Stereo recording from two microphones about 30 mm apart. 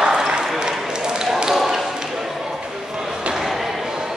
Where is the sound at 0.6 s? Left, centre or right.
Right.